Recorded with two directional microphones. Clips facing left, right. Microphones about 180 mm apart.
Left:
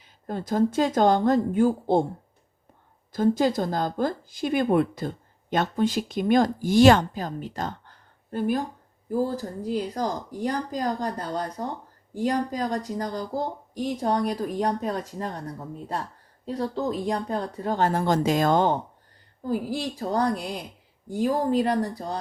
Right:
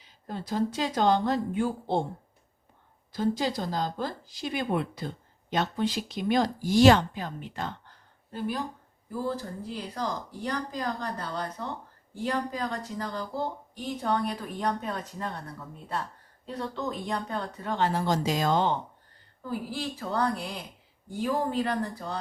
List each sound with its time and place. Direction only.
0.0 s speech: 50° left (ahead or behind)
3.1 s speech: 50° left (ahead or behind)